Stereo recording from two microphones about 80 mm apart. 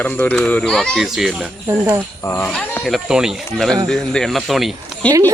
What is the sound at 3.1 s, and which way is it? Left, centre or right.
Speech, centre.